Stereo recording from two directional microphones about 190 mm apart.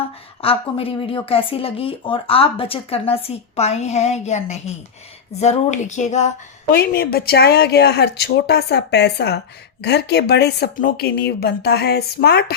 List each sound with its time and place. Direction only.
0.4 s speech: 30° left (ahead or behind)
6.7 s speech: 55° left (ahead or behind)